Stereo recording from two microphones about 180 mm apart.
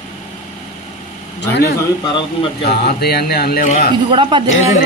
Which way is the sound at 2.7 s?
60° left (ahead or behind).